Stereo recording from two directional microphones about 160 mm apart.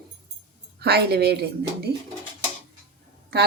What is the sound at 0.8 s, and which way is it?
Speech, 85° right.